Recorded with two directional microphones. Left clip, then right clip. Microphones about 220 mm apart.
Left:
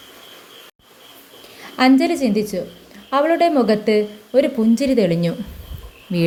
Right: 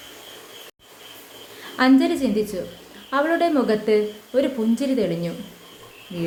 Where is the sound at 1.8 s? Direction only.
20° left (ahead or behind).